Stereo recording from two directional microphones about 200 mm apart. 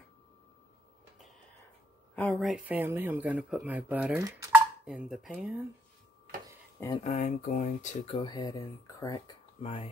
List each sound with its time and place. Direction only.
2.1 s speech: 5° left (ahead or behind)
7.0 s speech: 35° left (ahead or behind); by 9.2 s 15° left (ahead or behind)
9.6 s speech: 25° left (ahead or behind)